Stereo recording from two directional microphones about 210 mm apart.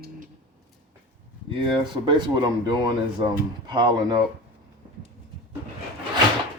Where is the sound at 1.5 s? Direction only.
25° right (ahead or behind).